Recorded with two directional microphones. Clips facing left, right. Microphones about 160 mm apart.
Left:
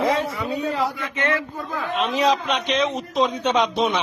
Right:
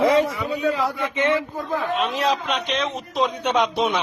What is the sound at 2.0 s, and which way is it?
A man's voice, centre (ahead or behind).